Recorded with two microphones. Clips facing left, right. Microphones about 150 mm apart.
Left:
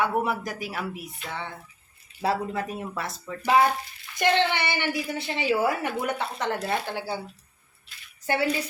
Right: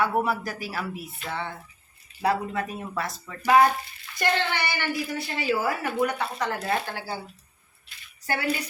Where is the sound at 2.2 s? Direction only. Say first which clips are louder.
Right 1 dB; 25° left (ahead or behind).